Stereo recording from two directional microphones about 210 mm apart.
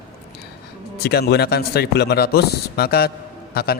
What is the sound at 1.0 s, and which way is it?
A man's voice, 50° left (ahead or behind).